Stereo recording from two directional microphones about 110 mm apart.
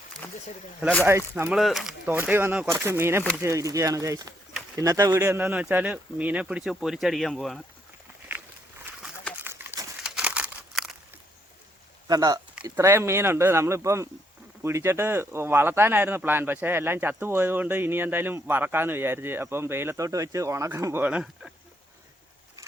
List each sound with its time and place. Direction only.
1.5 s speech: centre (ahead or behind)
2.0 s speech: 15° right (ahead or behind); by 7.6 s centre (ahead or behind)
9.4 s a sound: 20° right (ahead or behind)
10.0 s crumpling: 10° right (ahead or behind)
12.0 s speech: 35° right (ahead or behind)
12.7 s speech: 20° right (ahead or behind)
21.0 s speech: 10° right (ahead or behind)